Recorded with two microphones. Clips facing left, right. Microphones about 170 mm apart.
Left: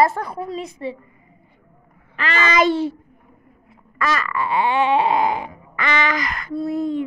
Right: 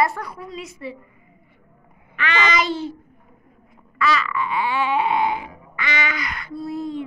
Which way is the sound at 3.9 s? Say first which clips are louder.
Right 1 dB; 45° left (ahead or behind).